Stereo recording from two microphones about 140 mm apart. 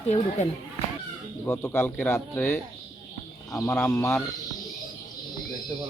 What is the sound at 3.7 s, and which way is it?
Speech, 10° left (ahead or behind).